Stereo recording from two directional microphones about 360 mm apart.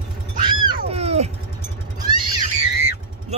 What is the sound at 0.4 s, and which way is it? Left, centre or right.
Cat, centre.